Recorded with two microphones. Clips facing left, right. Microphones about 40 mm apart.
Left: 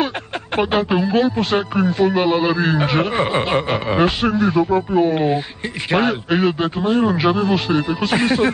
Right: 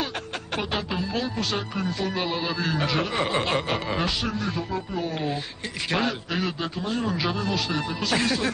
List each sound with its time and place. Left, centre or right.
0.6 s a man's voice: left
4.2 s a man's voice: left